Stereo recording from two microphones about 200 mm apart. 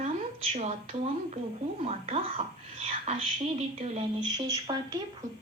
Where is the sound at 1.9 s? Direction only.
30° right (ahead or behind).